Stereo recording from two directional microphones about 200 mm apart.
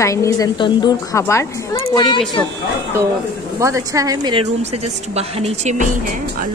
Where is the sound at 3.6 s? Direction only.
15° right (ahead or behind).